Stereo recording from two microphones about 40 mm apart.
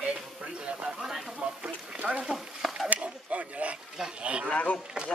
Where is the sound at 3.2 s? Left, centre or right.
Right.